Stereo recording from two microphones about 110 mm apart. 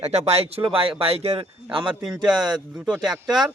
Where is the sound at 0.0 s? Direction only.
75° right (ahead or behind); by 1.9 s 55° right (ahead or behind).